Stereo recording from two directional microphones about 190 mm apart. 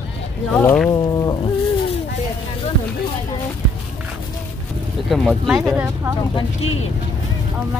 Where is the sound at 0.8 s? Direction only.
20° left (ahead or behind).